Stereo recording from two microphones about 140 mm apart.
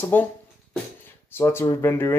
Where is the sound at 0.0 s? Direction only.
15° left (ahead or behind).